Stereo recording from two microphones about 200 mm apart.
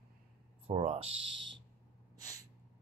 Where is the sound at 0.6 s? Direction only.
30° right (ahead or behind).